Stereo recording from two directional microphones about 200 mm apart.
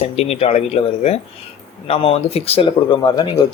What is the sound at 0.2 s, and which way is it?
Speech, 30° left (ahead or behind).